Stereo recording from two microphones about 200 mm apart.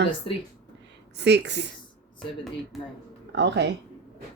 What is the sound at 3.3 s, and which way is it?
Speech, 60° right (ahead or behind).